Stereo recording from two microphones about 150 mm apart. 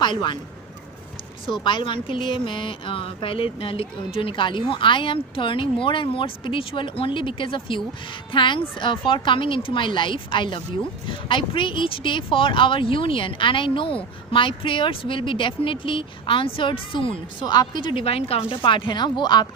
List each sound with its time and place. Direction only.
1.5 s speech: 30° left (ahead or behind)